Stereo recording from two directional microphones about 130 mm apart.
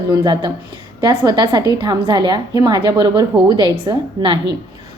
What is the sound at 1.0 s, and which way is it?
A woman's voice, 35° right (ahead or behind).